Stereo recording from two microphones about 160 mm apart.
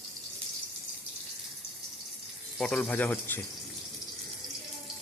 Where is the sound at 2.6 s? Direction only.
5° left (ahead or behind).